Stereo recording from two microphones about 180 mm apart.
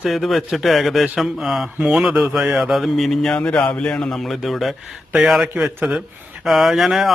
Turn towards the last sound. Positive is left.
turn(degrees=0)  # may be behind; listen again after turning